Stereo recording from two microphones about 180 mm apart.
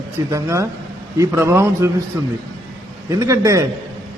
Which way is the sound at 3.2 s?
15° right (ahead or behind).